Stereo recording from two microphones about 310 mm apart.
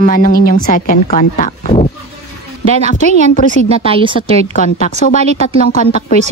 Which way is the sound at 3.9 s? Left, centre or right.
Centre.